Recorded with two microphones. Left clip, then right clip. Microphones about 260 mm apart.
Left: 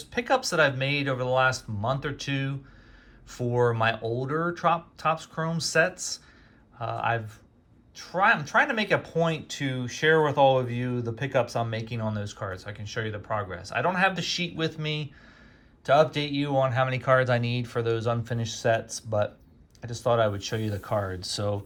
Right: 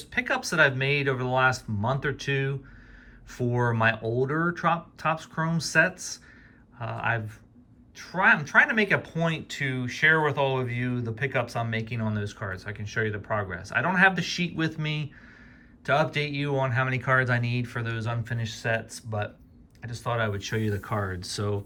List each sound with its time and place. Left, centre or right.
0.1 s speech: centre